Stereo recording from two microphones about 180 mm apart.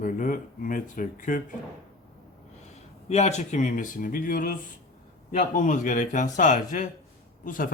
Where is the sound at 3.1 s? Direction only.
40° left (ahead or behind).